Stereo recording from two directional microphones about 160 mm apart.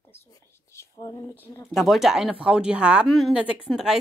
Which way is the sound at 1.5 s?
15° left (ahead or behind).